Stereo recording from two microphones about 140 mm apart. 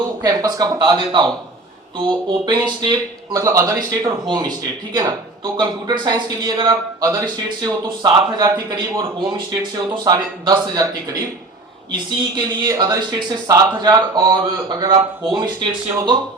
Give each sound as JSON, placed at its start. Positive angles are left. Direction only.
{"t": 0.2, "sound": "speech", "side_deg": -30}